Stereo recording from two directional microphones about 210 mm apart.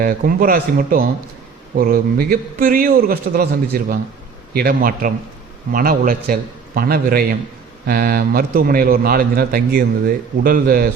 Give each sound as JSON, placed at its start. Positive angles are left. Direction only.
{"t": 0.0, "sound": "a man's voice", "side_deg": -45}